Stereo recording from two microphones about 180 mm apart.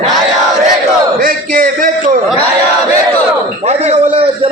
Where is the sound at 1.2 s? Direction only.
55° right (ahead or behind).